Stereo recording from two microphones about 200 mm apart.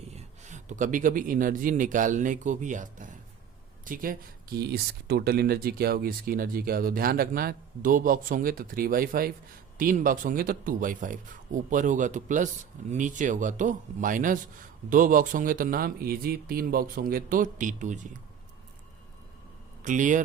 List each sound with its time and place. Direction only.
0.1 s speech: 35° right (ahead or behind)
19.8 s speech: 40° right (ahead or behind)